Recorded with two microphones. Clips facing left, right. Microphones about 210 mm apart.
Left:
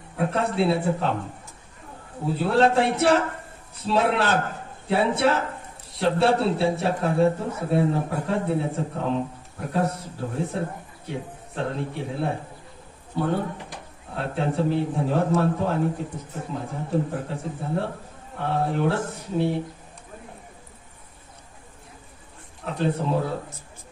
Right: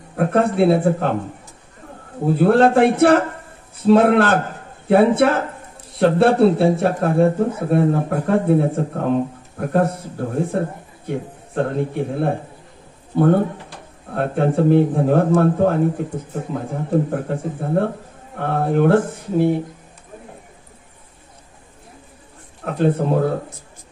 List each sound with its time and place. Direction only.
0.1 s speech: 55° right (ahead or behind)
2.2 s a man's voice: 55° right (ahead or behind)
22.7 s speech: 55° right (ahead or behind)